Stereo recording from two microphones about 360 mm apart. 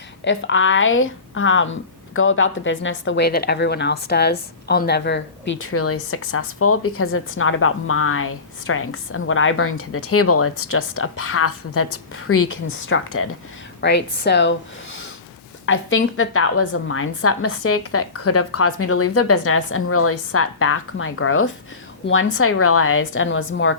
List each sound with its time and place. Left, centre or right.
0.3 s speech: left
15.6 s speech: left